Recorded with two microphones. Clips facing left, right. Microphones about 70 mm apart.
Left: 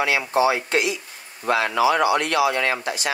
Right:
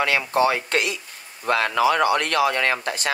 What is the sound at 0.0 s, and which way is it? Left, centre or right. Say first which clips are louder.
Speech: even; right.